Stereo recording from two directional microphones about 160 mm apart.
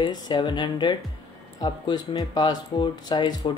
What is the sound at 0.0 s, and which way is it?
Speech, 30° left (ahead or behind).